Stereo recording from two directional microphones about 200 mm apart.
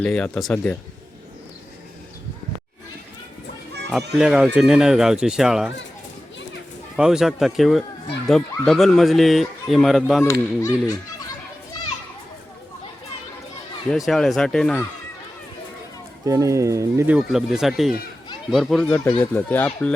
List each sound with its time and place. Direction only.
0.0 s speech: 5° left (ahead or behind)
3.8 s speech: centre (ahead or behind)
6.9 s speech: 5° right (ahead or behind)
10.6 s speech: 15° left (ahead or behind)
13.9 s speech: centre (ahead or behind)
16.2 s speech: 15° right (ahead or behind); by 19.9 s 10° left (ahead or behind)